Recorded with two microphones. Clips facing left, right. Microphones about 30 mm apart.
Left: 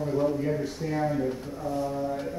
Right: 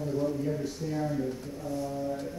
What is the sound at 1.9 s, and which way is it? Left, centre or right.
Brass instrument, left.